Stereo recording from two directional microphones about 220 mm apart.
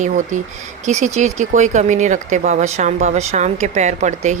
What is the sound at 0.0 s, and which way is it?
Speech, 35° right (ahead or behind).